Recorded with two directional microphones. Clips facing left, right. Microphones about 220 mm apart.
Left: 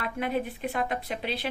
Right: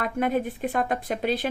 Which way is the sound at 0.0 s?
45° right (ahead or behind).